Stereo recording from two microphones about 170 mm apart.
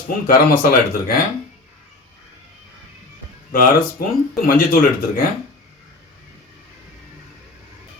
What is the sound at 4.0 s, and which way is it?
Speech, 60° left (ahead or behind).